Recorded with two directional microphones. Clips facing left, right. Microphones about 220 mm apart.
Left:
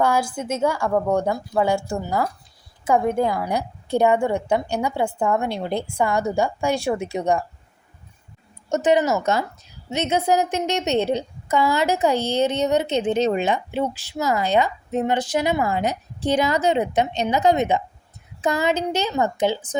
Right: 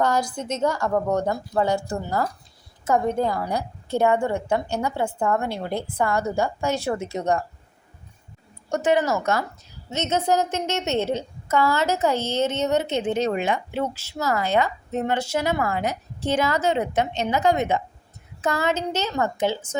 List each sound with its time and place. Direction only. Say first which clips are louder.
0.0 s a woman's voice: left 2 dB; 10° left (ahead or behind)
8.7 s a woman's voice: left 2 dB; 20° left (ahead or behind)